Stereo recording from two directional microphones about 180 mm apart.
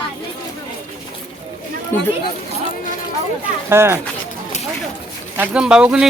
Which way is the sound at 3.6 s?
15° right (ahead or behind).